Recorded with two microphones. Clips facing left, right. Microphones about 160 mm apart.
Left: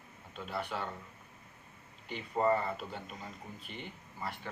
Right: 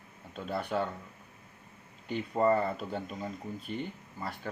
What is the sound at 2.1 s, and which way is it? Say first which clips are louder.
Speech: right 3 dB; 45° right (ahead or behind).